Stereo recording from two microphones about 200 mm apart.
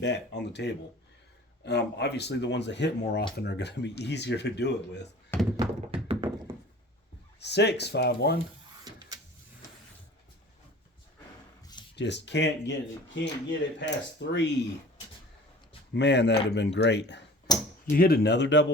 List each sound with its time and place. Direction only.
0.0 s speech: 60° left (ahead or behind)
5.5 s tap: 30° right (ahead or behind)
7.4 s speech: 55° left (ahead or behind)
11.9 s speech: 60° left (ahead or behind)
16.0 s speech: 60° left (ahead or behind)
17.5 s speech: 20° left (ahead or behind)
17.9 s speech: 50° left (ahead or behind)